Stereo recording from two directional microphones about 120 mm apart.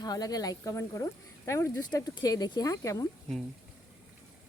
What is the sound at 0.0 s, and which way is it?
Speech, 35° left (ahead or behind).